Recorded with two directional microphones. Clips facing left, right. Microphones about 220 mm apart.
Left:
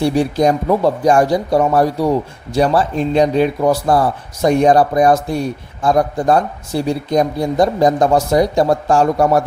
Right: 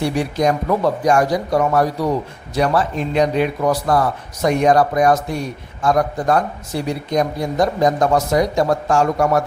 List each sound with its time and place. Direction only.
0.0 s speech: 30° left (ahead or behind)